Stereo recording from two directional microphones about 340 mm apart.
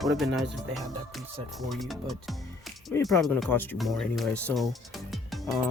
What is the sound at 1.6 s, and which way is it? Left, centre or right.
Speech, centre.